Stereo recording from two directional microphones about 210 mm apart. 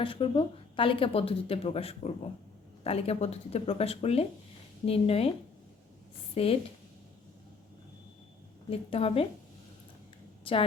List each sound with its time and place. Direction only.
0.0 s speech: 25° left (ahead or behind)
6.3 s a woman's voice: 30° left (ahead or behind)
8.7 s speech: 25° left (ahead or behind)